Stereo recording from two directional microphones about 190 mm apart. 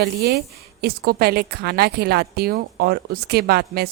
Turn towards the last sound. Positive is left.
turn(degrees=-55)  # may be behind; listen again after turning